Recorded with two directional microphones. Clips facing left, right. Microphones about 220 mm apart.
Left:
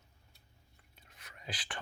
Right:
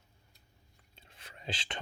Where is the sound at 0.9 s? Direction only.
25° right (ahead or behind).